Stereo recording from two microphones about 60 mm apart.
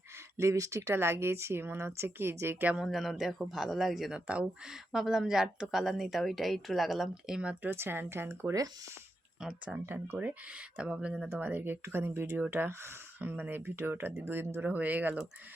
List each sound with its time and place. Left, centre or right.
0.3 s speech: right
0.9 s a woman's voice: right
2.7 s speech: centre
7.6 s speech: right
8.3 s a woman's voice: right
9.8 s a woman's voice: right
10.8 s speech: centre
11.3 s speech: right
14.6 s speech: right